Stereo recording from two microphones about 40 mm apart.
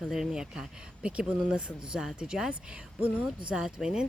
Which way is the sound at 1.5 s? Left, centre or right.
Right.